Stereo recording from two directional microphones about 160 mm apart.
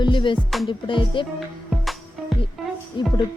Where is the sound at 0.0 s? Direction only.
30° left (ahead or behind).